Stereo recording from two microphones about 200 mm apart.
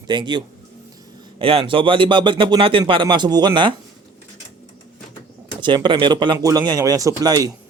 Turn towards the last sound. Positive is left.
turn(degrees=-20)  # may be behind; listen again after turning